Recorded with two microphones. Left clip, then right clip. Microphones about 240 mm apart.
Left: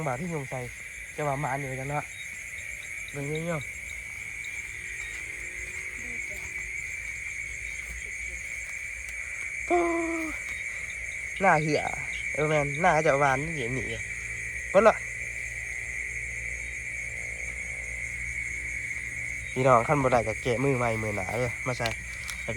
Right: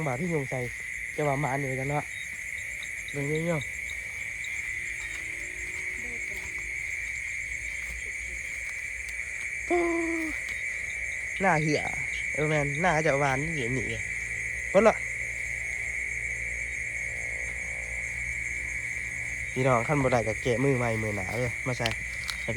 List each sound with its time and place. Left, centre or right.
0.0 s speech: centre
3.3 s speech: centre
9.6 s owl: centre
11.3 s speech: centre
19.5 s speech: centre